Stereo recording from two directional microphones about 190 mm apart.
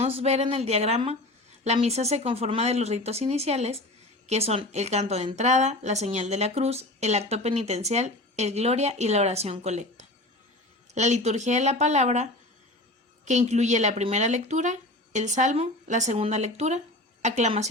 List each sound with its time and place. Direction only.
0.0 s a woman's voice: 30° right (ahead or behind)